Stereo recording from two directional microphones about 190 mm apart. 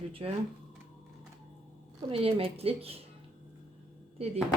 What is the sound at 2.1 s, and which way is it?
Speech, 30° right (ahead or behind).